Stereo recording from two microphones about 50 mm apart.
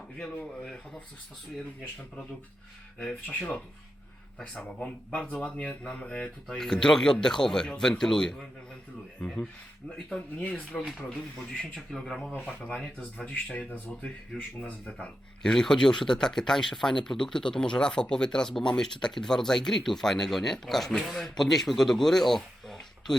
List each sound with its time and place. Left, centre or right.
0.3 s speech: left
3.0 s speech: left
5.1 s speech: centre
9.9 s speech: left
10.8 s speech: centre
11.5 s speech: left
11.9 s speech: centre
12.3 s speech: left
13.7 s speech: left
14.3 s speech: left
15.4 s speech: centre